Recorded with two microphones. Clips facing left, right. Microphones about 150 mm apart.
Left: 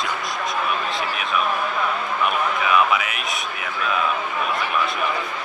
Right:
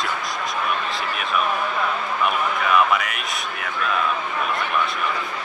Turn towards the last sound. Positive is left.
turn(degrees=0)  # may be behind; listen again after turning